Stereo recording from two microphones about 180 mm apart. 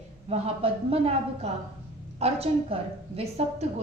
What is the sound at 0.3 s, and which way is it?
A woman's voice, 35° right (ahead or behind).